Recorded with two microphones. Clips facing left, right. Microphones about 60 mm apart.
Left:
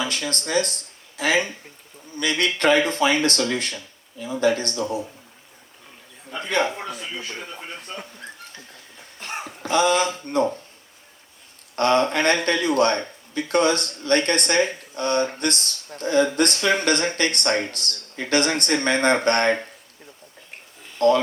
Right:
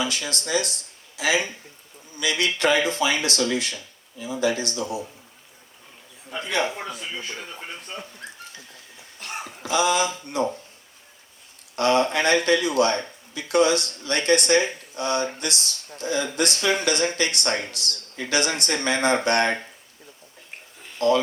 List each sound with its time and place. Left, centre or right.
0.1 s speech: left
9.6 s speech: left
11.8 s speech: left